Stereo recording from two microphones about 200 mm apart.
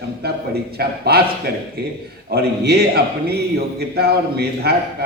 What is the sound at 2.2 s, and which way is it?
A man's voice, 50° right (ahead or behind).